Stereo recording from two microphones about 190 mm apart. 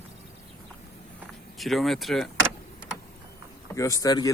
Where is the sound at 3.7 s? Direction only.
15° left (ahead or behind).